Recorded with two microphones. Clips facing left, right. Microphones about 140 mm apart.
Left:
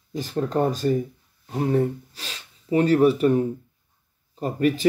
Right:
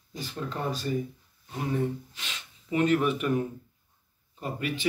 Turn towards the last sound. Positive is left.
turn(degrees=40)  # may be behind; listen again after turning